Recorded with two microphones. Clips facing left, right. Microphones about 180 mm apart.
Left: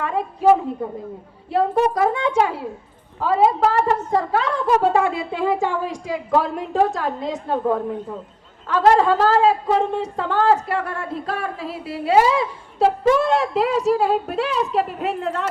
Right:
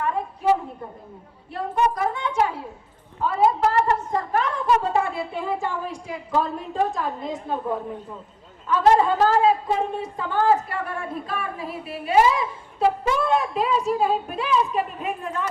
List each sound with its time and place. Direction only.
0.0 s a woman's voice: 90° left
1.5 s a woman's voice: 90° left